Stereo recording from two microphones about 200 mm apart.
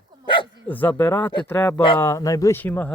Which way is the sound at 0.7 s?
10° left (ahead or behind).